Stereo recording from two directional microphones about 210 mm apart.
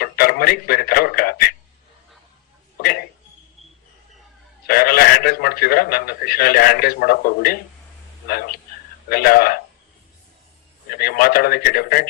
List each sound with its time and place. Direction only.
0.0 s a sound: 45° left (ahead or behind)
4.6 s a man's voice: 45° left (ahead or behind)
9.0 s a man's voice: 45° left (ahead or behind)
10.9 s a man's voice: 45° left (ahead or behind)